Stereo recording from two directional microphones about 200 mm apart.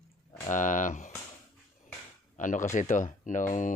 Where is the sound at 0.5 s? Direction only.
40° left (ahead or behind).